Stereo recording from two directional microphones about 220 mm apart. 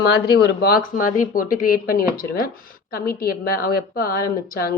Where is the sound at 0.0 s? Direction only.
45° left (ahead or behind).